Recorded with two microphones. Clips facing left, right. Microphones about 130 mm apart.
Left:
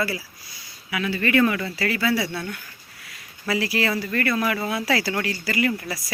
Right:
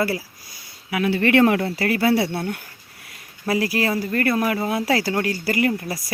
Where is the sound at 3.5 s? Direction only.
45° right (ahead or behind).